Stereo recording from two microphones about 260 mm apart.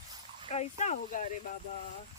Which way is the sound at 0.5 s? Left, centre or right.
Left.